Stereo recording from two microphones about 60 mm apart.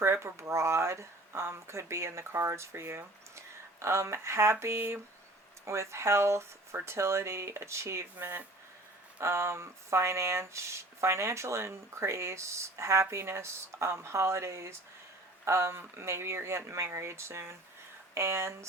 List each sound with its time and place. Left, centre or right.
0.0 s speech: right